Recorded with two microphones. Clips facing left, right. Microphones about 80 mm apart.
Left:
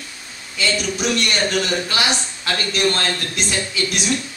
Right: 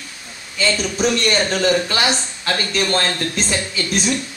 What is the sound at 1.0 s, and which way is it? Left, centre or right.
A man's voice, right.